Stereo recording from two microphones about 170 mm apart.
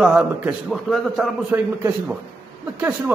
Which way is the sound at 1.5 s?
10° right (ahead or behind).